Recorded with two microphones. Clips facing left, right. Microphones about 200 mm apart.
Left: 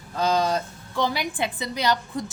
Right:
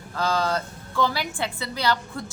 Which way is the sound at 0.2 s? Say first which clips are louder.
Left 2 dB; 20° left (ahead or behind).